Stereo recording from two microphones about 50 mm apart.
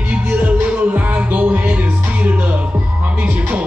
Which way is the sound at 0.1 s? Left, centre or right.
Right.